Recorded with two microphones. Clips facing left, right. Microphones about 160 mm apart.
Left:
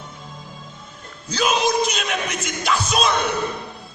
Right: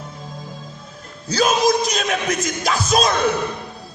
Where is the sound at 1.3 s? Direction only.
40° right (ahead or behind).